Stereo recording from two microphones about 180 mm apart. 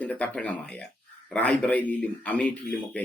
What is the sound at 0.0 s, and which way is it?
Speech, 10° left (ahead or behind).